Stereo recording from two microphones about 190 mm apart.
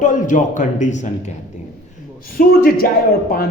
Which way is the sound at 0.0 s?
45° left (ahead or behind).